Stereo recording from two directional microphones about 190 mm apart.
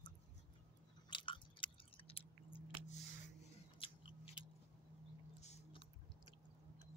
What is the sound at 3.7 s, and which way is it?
Biting, 30° left (ahead or behind).